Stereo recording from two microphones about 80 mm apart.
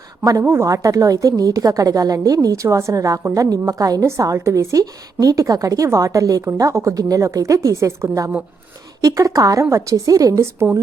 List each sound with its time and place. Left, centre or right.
0.4 s a woman's voice: right